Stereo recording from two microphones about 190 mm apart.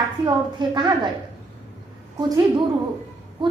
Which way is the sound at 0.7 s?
25° right (ahead or behind).